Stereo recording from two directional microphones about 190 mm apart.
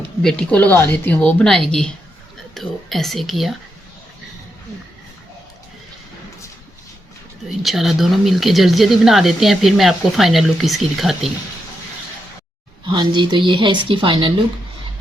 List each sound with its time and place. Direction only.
0.2 s speech: 5° left (ahead or behind)
7.6 s speech: centre (ahead or behind)
12.8 s speech: 25° right (ahead or behind)